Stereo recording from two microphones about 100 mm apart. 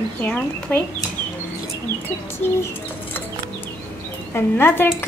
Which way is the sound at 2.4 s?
25° left (ahead or behind).